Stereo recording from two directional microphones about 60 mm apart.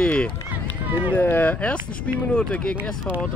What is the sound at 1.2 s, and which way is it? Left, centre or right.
A man's voice, left.